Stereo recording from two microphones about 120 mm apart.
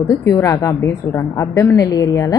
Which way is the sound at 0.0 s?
25° left (ahead or behind).